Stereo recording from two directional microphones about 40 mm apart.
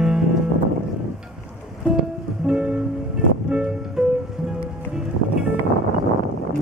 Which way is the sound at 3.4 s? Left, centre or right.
Right.